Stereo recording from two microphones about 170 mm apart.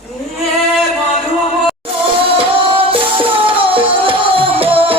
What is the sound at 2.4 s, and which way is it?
Music, 30° right (ahead or behind).